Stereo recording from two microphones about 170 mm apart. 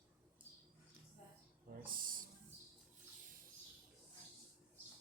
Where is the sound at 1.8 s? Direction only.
55° right (ahead or behind).